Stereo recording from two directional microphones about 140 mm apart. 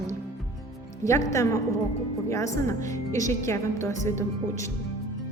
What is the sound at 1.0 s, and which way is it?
A woman's voice, 20° left (ahead or behind).